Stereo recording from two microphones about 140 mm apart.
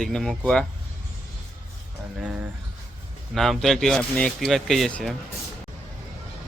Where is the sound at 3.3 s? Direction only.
Centre (ahead or behind).